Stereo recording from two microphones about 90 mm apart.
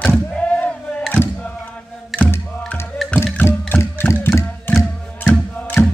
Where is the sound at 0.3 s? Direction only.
15° left (ahead or behind).